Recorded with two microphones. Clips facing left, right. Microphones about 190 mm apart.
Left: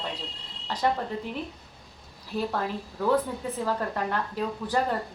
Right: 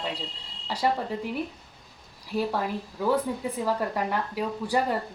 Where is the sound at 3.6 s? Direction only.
10° right (ahead or behind).